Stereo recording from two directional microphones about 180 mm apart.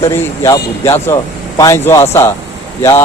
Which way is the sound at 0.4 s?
20° left (ahead or behind).